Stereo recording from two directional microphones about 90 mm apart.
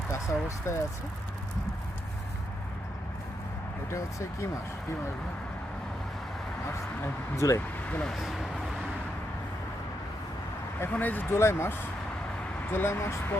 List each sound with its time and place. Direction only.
0.1 s speech: 30° left (ahead or behind)
3.9 s speech: 35° left (ahead or behind)
7.0 s speech: 35° left (ahead or behind)
7.9 s speech: 15° left (ahead or behind)
8.1 s speech: centre (ahead or behind)
10.8 s speech: 20° left (ahead or behind)